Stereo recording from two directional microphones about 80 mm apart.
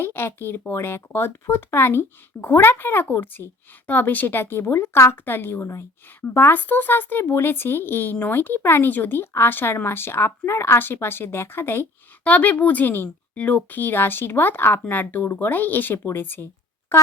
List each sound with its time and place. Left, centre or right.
0.0 s speech: left